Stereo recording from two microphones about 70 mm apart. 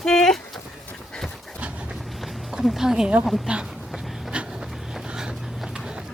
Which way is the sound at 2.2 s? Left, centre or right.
Centre.